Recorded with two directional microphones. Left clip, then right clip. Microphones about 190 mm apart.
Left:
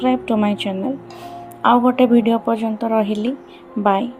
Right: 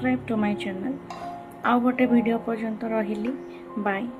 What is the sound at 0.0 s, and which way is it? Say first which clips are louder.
Speech: left 8 dB; 35° left (ahead or behind).